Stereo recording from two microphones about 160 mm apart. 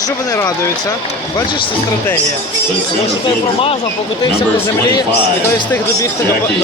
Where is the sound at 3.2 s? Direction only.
35° left (ahead or behind).